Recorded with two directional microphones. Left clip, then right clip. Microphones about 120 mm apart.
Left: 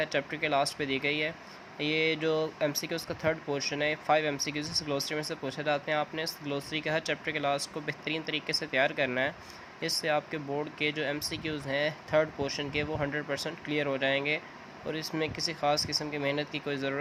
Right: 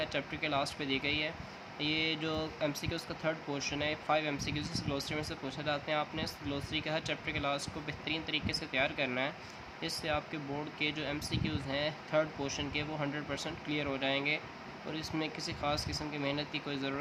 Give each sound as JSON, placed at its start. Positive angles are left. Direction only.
{"t": 0.0, "sound": "speech", "side_deg": 50}